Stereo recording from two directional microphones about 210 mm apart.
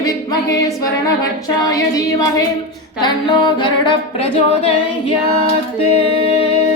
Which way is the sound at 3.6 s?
20° left (ahead or behind).